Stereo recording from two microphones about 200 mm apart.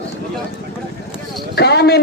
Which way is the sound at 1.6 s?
55° left (ahead or behind).